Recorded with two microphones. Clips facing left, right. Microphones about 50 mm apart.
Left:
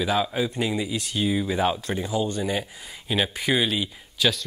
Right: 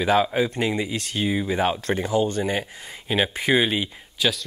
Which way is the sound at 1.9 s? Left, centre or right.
Right.